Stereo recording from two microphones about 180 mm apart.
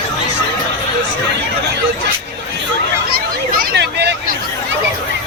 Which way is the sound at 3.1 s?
55° right (ahead or behind).